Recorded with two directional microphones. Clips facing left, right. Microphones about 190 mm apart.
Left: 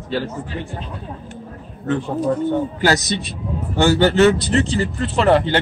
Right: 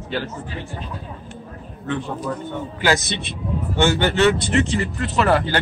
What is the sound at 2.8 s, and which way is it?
A man's voice, 40° left (ahead or behind).